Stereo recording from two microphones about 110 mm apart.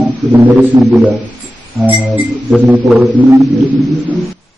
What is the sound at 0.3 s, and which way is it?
Speech, 15° right (ahead or behind).